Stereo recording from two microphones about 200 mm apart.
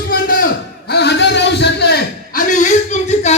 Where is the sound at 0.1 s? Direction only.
45° left (ahead or behind).